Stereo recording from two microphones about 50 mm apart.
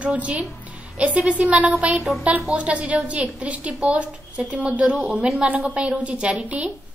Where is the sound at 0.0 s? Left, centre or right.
Right.